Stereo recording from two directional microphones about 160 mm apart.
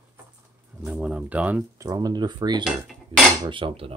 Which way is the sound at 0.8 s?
5° right (ahead or behind).